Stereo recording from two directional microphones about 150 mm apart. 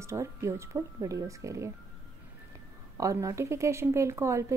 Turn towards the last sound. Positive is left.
turn(degrees=-20)  # may be behind; listen again after turning